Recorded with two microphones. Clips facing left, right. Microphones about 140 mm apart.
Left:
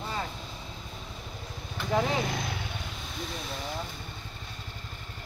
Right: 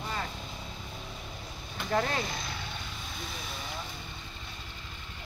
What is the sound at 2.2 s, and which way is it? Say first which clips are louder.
Vehicle: left 5 dB; 65° left (ahead or behind).